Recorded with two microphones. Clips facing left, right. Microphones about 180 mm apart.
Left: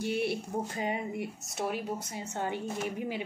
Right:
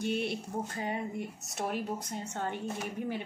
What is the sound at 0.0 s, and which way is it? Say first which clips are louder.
A woman's voice: left 2 dB; 5° left (ahead or behind).